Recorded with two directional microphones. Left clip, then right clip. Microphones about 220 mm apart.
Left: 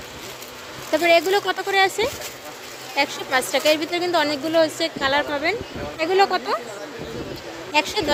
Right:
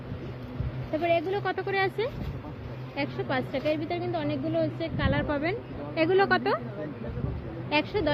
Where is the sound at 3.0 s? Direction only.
30° left (ahead or behind); by 6.6 s 15° left (ahead or behind).